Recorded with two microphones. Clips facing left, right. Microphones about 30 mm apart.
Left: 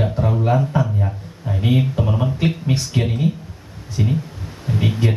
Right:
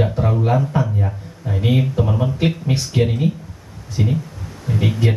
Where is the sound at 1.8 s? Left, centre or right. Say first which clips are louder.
Right 1 dB; centre.